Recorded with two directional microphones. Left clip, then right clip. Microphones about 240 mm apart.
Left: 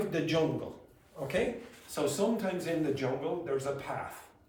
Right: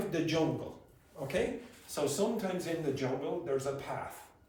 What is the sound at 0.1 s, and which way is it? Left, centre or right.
Speech, centre.